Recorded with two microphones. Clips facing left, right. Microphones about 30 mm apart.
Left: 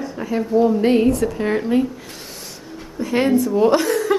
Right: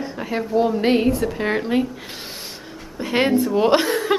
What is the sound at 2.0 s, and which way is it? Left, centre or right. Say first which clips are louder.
Gasp: right 2 dB; right.